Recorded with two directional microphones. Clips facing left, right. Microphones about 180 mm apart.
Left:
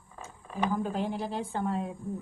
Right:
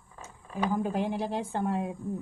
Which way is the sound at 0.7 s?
15° right (ahead or behind).